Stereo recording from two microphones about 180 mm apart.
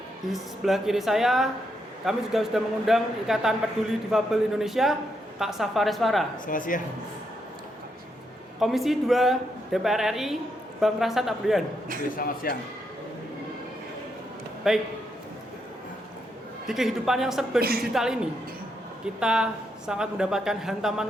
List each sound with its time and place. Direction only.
0.3 s speech: centre (ahead or behind)
6.4 s speech: 50° left (ahead or behind)
8.6 s speech: centre (ahead or behind)
12.1 s speech: 55° left (ahead or behind)
14.7 s speech: 5° right (ahead or behind)
16.6 s speech: centre (ahead or behind)